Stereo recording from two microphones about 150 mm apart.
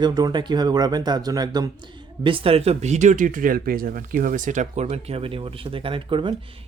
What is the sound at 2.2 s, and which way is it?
Speech, 35° right (ahead or behind).